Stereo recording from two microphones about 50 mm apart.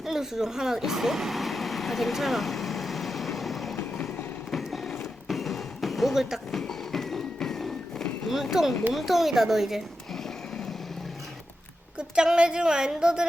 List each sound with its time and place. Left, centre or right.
0.0 s vehicle: centre
4.5 s music: centre
6.5 s a sound: centre
7.3 s thump: centre
8.3 s speech: centre
11.9 s speech: centre